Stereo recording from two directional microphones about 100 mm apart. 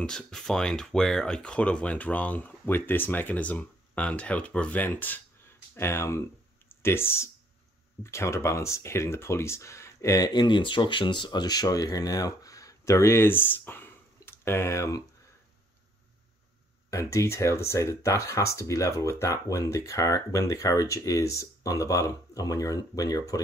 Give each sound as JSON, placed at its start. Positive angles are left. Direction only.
{"t": 0.0, "sound": "speech", "side_deg": 5}
{"t": 16.9, "sound": "speech", "side_deg": 30}